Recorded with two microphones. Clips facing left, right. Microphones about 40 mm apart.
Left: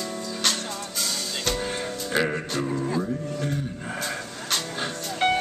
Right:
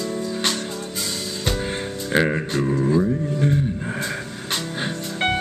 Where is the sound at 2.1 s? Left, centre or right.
Right.